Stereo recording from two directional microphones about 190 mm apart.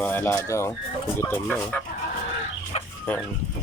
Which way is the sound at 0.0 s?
10° left (ahead or behind).